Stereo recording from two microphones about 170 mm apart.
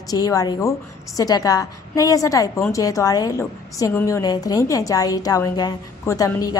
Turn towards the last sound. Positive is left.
turn(degrees=20)  # may be behind; listen again after turning